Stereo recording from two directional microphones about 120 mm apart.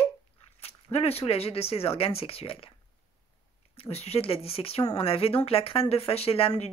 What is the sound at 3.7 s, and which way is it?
Speech, 55° left (ahead or behind).